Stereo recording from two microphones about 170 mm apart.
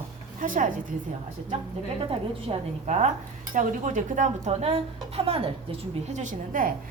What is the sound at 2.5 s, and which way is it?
A woman's voice, 40° right (ahead or behind).